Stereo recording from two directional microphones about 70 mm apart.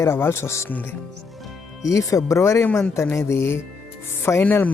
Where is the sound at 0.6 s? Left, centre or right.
Left.